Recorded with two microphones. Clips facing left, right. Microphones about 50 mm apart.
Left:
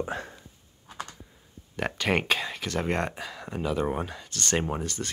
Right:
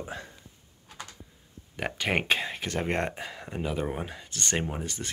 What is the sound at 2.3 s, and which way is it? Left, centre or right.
Speech, right.